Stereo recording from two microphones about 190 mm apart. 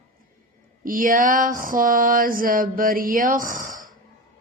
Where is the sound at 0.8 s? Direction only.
45° right (ahead or behind).